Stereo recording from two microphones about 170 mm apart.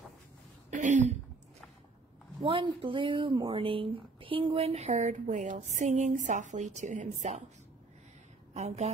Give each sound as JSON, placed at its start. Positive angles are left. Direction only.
{"t": 0.7, "sound": "a sound", "side_deg": -45}
{"t": 2.4, "sound": "speech", "side_deg": -30}
{"t": 8.5, "sound": "speech", "side_deg": -40}